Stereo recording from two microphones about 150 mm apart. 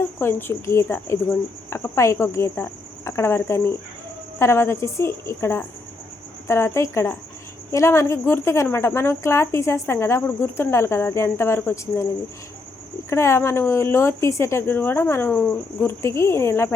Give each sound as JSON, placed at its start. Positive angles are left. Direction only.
{"t": 0.2, "sound": "speech", "side_deg": 15}
{"t": 13.1, "sound": "speech", "side_deg": 20}